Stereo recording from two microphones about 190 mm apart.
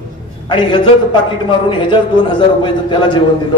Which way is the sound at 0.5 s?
25° left (ahead or behind).